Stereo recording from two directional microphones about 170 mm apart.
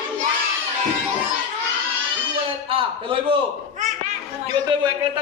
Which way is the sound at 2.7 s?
30° right (ahead or behind).